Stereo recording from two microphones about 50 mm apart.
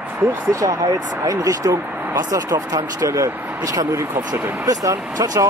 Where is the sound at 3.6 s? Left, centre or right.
Right.